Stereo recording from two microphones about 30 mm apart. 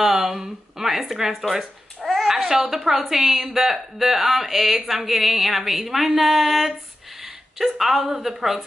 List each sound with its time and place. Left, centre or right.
0.4 s a woman's voice: centre
2.0 s babbling: centre
2.3 s a sound: centre
2.7 s a woman's voice: centre